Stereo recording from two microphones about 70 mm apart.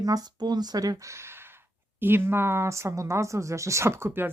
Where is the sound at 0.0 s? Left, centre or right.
Right.